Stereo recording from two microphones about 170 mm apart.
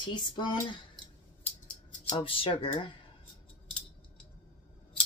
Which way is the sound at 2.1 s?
30° left (ahead or behind).